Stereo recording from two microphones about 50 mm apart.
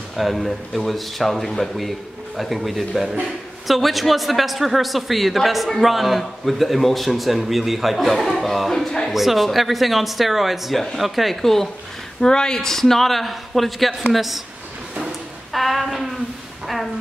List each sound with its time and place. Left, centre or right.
0.1 s speech: centre
9.1 s speech: centre
15.5 s a sound: centre